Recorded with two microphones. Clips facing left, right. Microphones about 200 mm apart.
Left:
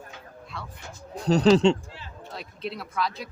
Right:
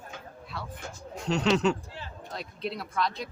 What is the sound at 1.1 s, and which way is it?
Speech, 35° left (ahead or behind).